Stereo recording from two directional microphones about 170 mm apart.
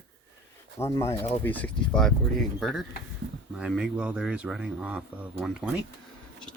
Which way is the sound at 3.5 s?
Centre (ahead or behind).